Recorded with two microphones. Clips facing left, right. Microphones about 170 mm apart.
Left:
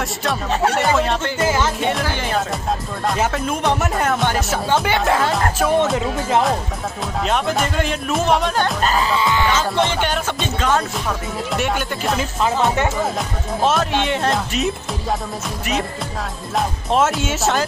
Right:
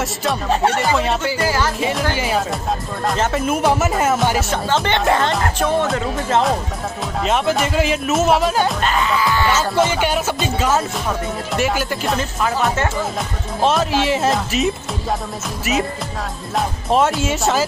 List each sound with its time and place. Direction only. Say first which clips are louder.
0.0 s music: right 1 dB; centre (ahead or behind)
7.2 s music: right 2 dB; centre (ahead or behind)
8.9 s music: even; 30° left (ahead or behind)
9.5 s music: right 2 dB; 5° right (ahead or behind)
13.6 s music: right 2 dB; centre (ahead or behind)
16.5 s music: right 1 dB; centre (ahead or behind)